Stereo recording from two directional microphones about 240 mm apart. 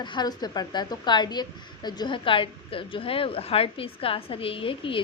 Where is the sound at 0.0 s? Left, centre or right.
Centre.